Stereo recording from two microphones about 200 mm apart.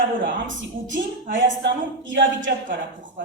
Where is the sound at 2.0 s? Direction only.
70° right (ahead or behind).